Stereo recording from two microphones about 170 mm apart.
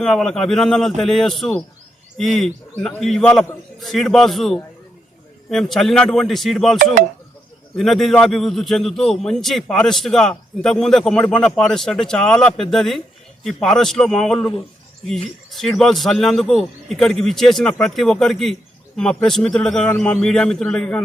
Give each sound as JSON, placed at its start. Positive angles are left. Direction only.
{"t": 0.0, "sound": "a man's voice", "side_deg": 5}
{"t": 7.8, "sound": "a man's voice", "side_deg": 0}
{"t": 15.4, "sound": "bird", "side_deg": 0}
{"t": 15.8, "sound": "a man's voice", "side_deg": 0}